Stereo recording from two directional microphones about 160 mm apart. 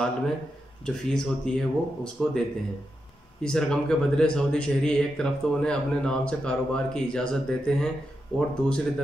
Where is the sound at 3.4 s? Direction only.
5° left (ahead or behind).